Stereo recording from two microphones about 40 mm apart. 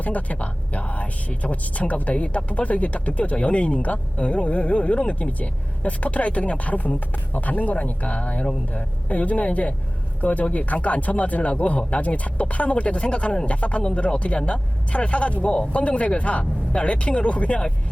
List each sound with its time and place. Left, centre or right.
0.0 s speech: left